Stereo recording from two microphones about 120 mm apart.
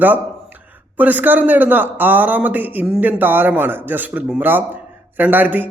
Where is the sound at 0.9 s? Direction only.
15° right (ahead or behind).